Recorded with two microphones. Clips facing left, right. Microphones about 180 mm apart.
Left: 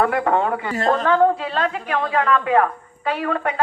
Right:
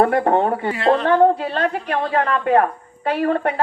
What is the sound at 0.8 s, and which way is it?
Speech, 45° left (ahead or behind).